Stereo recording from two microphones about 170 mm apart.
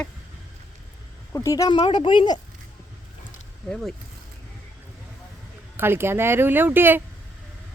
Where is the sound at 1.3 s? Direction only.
20° left (ahead or behind).